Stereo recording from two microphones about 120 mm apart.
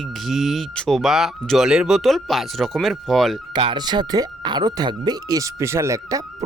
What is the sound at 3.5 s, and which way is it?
Speech, 40° right (ahead or behind).